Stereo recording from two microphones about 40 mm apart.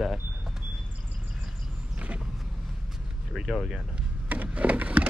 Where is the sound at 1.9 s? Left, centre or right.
Right.